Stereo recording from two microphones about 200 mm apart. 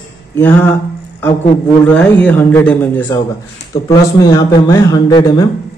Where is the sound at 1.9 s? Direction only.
10° left (ahead or behind).